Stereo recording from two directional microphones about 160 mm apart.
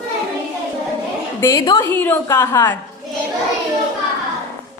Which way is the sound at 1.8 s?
15° left (ahead or behind).